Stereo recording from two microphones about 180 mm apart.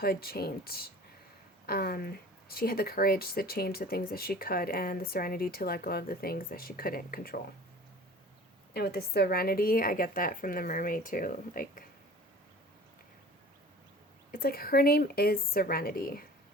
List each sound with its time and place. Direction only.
0.0 s speech: 60° left (ahead or behind)
8.7 s speech: 60° left (ahead or behind)
14.3 s speech: 55° left (ahead or behind)